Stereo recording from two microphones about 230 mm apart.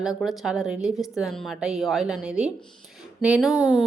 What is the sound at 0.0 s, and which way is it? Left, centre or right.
A woman's voice, centre.